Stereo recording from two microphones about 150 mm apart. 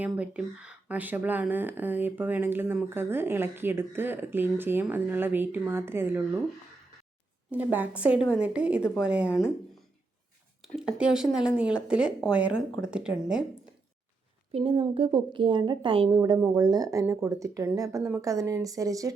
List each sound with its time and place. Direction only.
0.0 s speech: 10° right (ahead or behind)
7.5 s speech: 10° right (ahead or behind)
10.6 s speech: 5° right (ahead or behind)
14.5 s a woman's voice: 35° right (ahead or behind)